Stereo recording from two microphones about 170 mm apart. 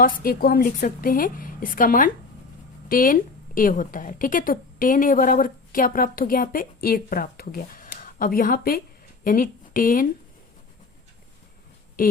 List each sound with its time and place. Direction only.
0.0 s a woman's voice: 55° left (ahead or behind)